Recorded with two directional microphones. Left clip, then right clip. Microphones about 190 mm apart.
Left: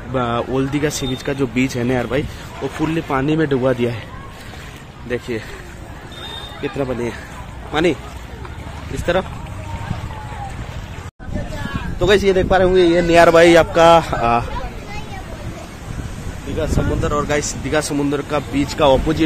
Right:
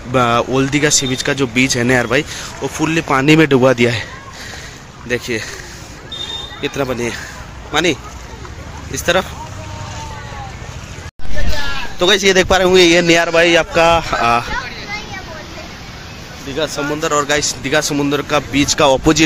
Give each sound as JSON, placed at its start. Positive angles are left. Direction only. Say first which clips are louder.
{"t": 0.1, "sound": "speech", "louder": "right 6 dB", "side_deg": -10}
{"t": 3.2, "sound": "speech", "louder": "right 8 dB", "side_deg": -20}
{"t": 6.6, "sound": "speech", "louder": "right 3 dB", "side_deg": 0}
{"t": 12.0, "sound": "speech", "louder": "right 2 dB", "side_deg": -5}
{"t": 12.4, "sound": "speech", "louder": "right 3 dB", "side_deg": -25}
{"t": 13.3, "sound": "speech", "louder": "left 2 dB", "side_deg": 10}
{"t": 14.1, "sound": "speech", "louder": "right 3 dB", "side_deg": 0}
{"t": 16.5, "sound": "speech", "louder": "right 3 dB", "side_deg": -15}
{"t": 18.8, "sound": "speech", "louder": "right 2 dB", "side_deg": -25}